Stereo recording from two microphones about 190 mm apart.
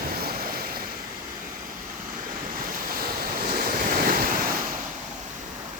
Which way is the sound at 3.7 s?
45° right (ahead or behind).